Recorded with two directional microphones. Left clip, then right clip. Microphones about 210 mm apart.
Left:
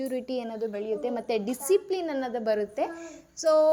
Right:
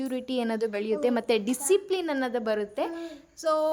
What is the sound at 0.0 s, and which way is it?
Speech, 10° right (ahead or behind).